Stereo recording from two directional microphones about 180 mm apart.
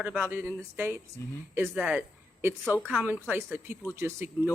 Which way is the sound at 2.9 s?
10° right (ahead or behind).